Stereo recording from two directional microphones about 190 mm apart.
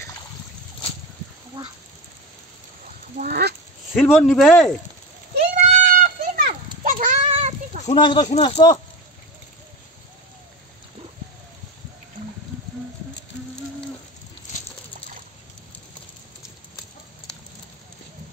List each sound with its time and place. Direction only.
3.3 s a sound: 60° right (ahead or behind)
3.9 s speech: centre (ahead or behind)
5.7 s children playing: 40° right (ahead or behind)
8.0 s speech: 25° left (ahead or behind)